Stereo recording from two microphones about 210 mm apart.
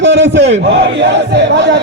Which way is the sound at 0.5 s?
60° right (ahead or behind).